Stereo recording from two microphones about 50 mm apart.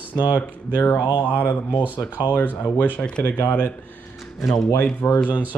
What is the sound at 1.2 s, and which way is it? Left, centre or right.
Speech, left.